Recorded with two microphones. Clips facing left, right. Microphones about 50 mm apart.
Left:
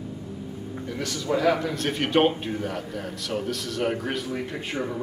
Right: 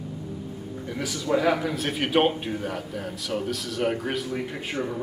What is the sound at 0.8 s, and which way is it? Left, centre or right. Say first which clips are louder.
A man's voice: even; centre.